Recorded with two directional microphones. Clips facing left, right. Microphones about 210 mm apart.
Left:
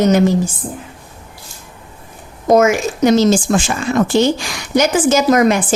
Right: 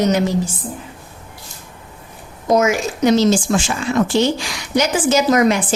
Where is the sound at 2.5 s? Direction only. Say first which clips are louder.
Left 4 dB; 50° left (ahead or behind).